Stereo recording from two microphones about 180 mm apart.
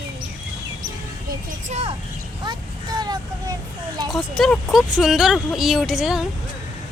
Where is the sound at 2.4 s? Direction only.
25° right (ahead or behind).